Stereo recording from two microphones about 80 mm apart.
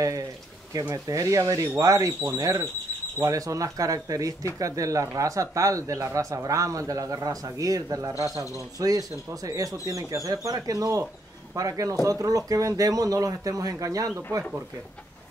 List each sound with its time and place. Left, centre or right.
0.7 s speech: right